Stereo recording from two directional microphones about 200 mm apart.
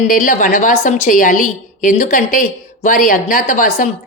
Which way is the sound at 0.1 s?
40° left (ahead or behind).